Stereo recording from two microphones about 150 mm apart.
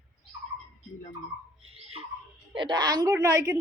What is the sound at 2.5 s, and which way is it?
A woman's voice, 30° right (ahead or behind).